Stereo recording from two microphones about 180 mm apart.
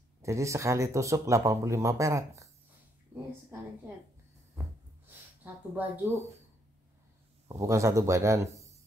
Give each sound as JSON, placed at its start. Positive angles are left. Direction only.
{"t": 0.2, "sound": "speech", "side_deg": -15}
{"t": 5.0, "sound": "speech", "side_deg": -10}
{"t": 7.6, "sound": "speech", "side_deg": -15}